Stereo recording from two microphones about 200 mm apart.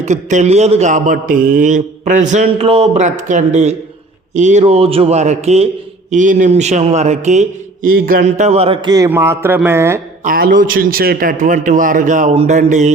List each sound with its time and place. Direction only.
0.0 s a man's voice: 35° right (ahead or behind); by 10.0 s 10° right (ahead or behind)
10.2 s a man's voice: 45° right (ahead or behind)